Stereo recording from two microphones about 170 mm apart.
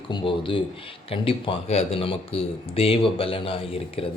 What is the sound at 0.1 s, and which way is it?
Speech, 30° left (ahead or behind).